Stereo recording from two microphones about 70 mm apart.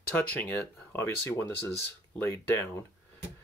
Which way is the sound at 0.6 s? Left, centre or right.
Left.